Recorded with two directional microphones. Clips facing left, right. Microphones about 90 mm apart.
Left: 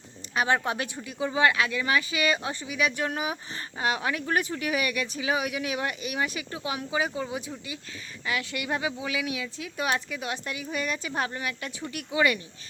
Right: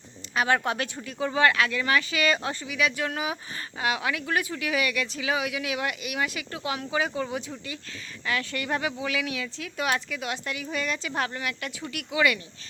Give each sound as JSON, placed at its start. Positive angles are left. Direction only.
{"t": 0.3, "sound": "speech", "side_deg": 20}